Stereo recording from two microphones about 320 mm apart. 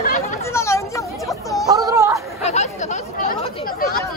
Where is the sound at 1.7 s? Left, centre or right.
Centre.